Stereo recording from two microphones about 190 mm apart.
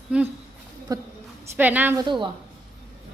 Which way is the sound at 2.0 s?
25° right (ahead or behind).